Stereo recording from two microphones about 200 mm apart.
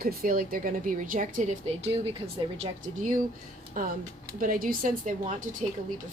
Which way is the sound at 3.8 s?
45° right (ahead or behind).